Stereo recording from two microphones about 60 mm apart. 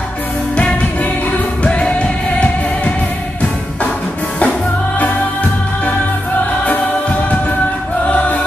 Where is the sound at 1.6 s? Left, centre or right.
Centre.